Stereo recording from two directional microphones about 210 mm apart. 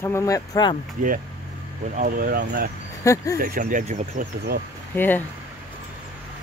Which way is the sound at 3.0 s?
15° left (ahead or behind).